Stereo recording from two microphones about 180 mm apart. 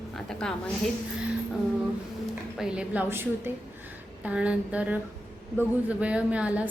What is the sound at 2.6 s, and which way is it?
Speech, 5° right (ahead or behind).